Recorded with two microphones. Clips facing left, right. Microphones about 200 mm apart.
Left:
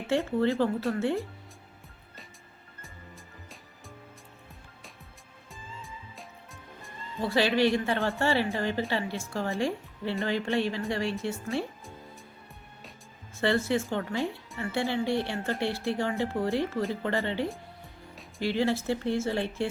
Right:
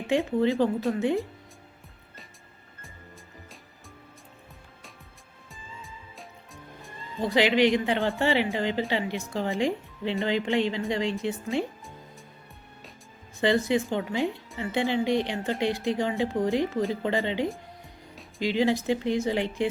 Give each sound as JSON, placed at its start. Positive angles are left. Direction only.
{"t": 0.1, "sound": "speech", "side_deg": -15}
{"t": 5.5, "sound": "music", "side_deg": 0}
{"t": 7.2, "sound": "speech", "side_deg": -15}
{"t": 13.3, "sound": "speech", "side_deg": -15}